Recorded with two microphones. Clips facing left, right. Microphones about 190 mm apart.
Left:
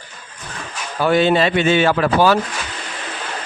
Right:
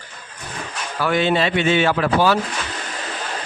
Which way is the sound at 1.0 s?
35° left (ahead or behind).